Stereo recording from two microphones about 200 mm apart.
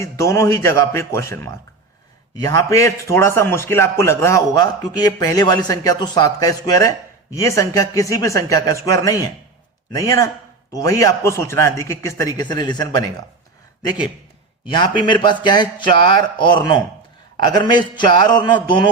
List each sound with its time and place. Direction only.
0.0 s a man's voice: 15° left (ahead or behind)
14.7 s speech: 25° left (ahead or behind)